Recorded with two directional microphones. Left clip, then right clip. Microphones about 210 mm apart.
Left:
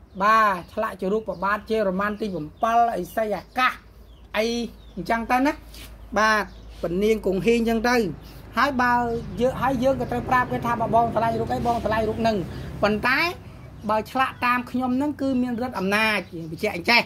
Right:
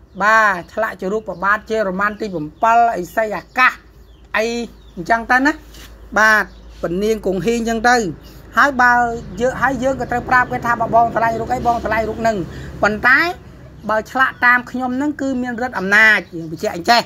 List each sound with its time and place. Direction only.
0.2 s speech: 15° right (ahead or behind)